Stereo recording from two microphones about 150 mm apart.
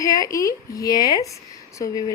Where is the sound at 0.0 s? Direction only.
20° left (ahead or behind).